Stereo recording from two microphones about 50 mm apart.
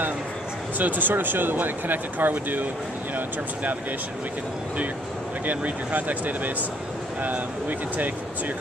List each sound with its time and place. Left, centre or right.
0.7 s speech: right
5.5 s speech: right